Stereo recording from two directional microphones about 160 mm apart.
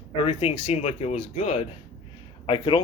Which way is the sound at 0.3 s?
40° left (ahead or behind).